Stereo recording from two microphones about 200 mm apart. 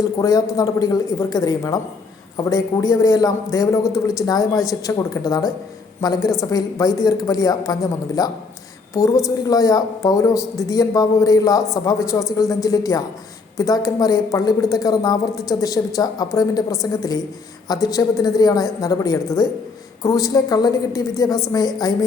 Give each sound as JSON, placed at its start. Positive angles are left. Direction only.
{"t": 0.0, "sound": "a woman's voice", "side_deg": 15}